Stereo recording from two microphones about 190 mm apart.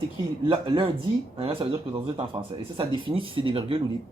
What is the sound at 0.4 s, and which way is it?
Speech, 25° right (ahead or behind).